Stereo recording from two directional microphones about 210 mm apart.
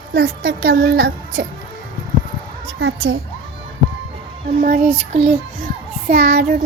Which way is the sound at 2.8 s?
60° right (ahead or behind).